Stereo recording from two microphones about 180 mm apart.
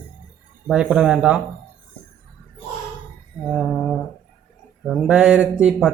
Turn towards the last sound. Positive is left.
turn(degrees=-5)  # may be behind; listen again after turning